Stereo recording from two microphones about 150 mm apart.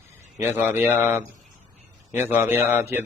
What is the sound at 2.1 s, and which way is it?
Speech, 15° right (ahead or behind).